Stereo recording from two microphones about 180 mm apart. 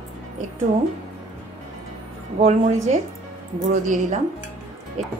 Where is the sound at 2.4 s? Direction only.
35° right (ahead or behind).